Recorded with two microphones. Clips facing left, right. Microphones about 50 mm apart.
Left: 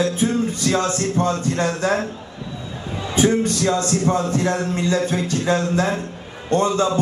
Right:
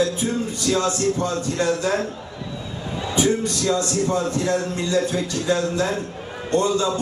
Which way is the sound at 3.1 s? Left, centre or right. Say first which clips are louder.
Left 3 dB; left.